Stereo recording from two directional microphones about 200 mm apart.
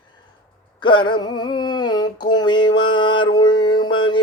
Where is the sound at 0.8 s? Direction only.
25° left (ahead or behind).